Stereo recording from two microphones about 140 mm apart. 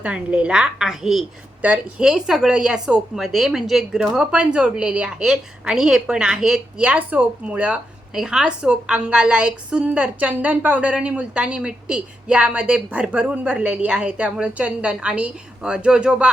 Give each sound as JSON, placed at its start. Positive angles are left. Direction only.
{"t": 0.0, "sound": "speech", "side_deg": -10}